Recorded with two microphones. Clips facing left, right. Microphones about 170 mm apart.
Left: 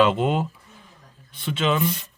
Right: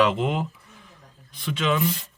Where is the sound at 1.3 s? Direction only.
25° left (ahead or behind).